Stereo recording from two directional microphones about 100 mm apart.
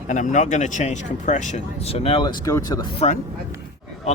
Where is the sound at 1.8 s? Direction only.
75° left (ahead or behind).